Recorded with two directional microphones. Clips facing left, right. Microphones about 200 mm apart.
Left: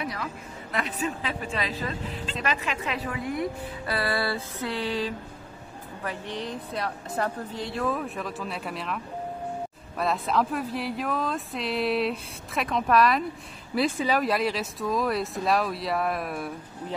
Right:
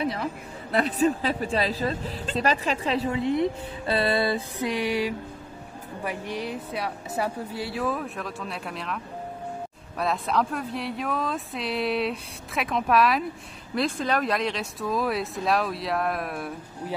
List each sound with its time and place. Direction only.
0.0 s a woman's voice: 30° right (ahead or behind); by 16.5 s centre (ahead or behind)